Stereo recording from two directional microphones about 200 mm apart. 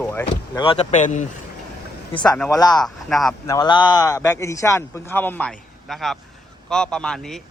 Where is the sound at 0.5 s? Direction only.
25° left (ahead or behind).